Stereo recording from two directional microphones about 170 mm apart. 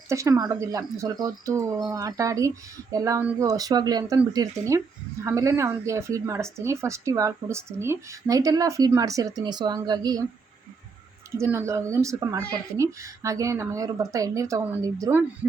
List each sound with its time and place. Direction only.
0.1 s speech: 20° right (ahead or behind)
11.3 s speech: 15° right (ahead or behind)